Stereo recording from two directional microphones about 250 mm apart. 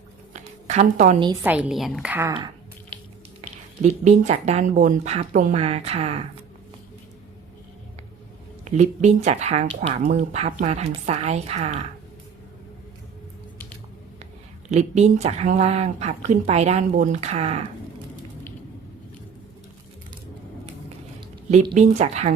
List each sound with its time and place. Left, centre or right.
0.3 s a woman's voice: right
1.5 s a woman's voice: centre
4.0 s speech: right
8.6 s speech: right
14.7 s speech: right
21.5 s speech: right